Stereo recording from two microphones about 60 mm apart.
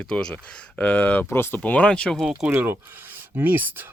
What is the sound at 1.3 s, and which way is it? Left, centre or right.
Speech, left.